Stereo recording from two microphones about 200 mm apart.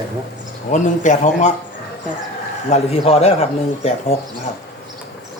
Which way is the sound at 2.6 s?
30° left (ahead or behind).